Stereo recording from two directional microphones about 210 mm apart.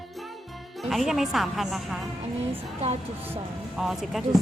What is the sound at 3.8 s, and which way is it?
Speech, centre (ahead or behind).